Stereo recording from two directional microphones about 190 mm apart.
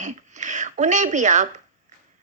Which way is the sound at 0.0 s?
40° right (ahead or behind).